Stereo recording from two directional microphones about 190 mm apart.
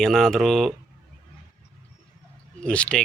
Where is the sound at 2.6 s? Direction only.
5° left (ahead or behind).